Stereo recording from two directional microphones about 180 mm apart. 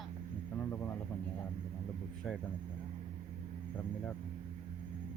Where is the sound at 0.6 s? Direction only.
10° left (ahead or behind).